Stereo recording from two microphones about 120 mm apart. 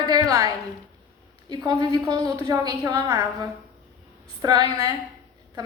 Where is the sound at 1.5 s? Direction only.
35° right (ahead or behind).